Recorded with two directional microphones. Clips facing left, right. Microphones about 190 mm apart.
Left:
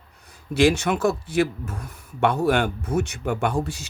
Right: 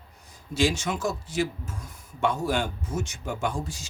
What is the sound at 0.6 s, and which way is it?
Speech, 65° left (ahead or behind).